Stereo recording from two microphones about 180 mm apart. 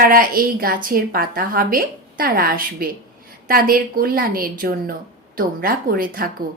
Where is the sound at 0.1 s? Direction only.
55° right (ahead or behind).